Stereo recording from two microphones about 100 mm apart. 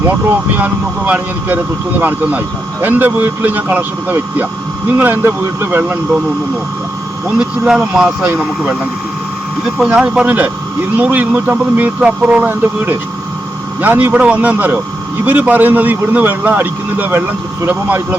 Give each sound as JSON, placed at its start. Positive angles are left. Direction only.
{"t": 0.5, "sound": "a man's voice", "side_deg": -15}
{"t": 7.3, "sound": "a man's voice", "side_deg": -5}
{"t": 9.9, "sound": "a man's voice", "side_deg": -10}